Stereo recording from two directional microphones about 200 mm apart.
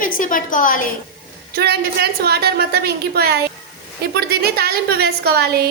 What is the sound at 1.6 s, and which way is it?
A woman's voice, 50° right (ahead or behind).